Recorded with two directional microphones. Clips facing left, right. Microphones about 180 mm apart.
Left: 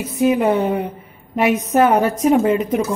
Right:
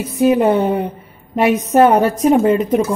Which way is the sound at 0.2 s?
35° right (ahead or behind).